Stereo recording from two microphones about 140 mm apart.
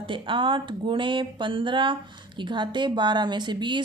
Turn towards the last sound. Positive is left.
turn(degrees=-35)  # may be behind; listen again after turning